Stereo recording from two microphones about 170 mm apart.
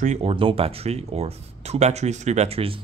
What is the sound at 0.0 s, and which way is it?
Speech, 40° right (ahead or behind).